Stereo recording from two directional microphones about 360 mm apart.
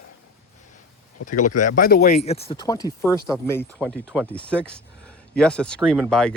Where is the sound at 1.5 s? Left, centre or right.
Left.